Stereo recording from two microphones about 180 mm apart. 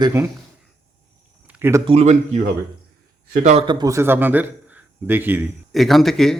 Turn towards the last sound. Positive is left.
turn(degrees=0)  # may be behind; listen again after turning